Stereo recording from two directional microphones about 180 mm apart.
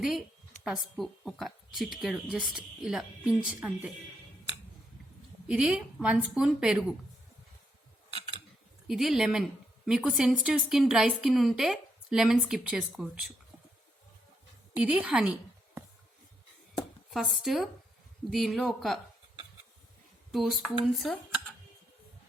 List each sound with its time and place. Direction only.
0.6 s speech: centre (ahead or behind)
5.5 s a woman's voice: 5° right (ahead or behind)
8.9 s speech: centre (ahead or behind)
14.8 s a woman's voice: 5° right (ahead or behind)
17.1 s speech: centre (ahead or behind)
20.3 s speech: centre (ahead or behind)